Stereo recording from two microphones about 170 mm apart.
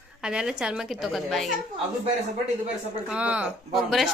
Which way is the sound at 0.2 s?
5° right (ahead or behind).